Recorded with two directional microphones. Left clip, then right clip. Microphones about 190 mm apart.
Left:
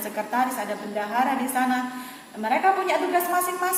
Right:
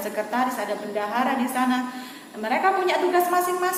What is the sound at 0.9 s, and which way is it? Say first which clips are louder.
A woman's voice: left 1 dB; 10° left (ahead or behind).